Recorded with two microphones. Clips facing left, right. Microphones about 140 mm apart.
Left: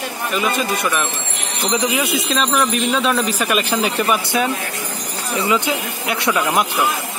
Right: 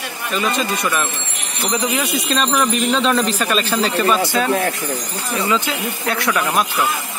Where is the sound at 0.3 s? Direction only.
5° left (ahead or behind).